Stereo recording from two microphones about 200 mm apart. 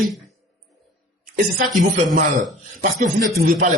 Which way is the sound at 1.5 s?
40° right (ahead or behind).